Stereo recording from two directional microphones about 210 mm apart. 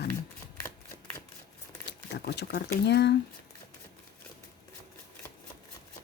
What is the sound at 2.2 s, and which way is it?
Speech, 55° left (ahead or behind).